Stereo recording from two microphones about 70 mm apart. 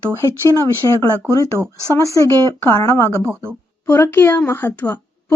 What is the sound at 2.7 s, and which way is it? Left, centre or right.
Speech, left.